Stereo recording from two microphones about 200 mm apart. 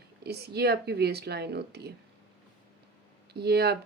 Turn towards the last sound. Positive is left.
turn(degrees=-55)  # may be behind; listen again after turning